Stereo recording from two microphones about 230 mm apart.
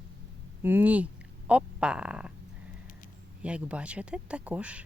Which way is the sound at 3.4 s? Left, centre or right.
Centre.